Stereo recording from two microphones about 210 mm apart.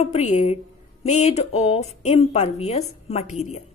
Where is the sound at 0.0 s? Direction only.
30° left (ahead or behind).